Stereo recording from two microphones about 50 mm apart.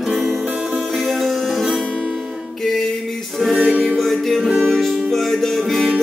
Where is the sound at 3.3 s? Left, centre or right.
Centre.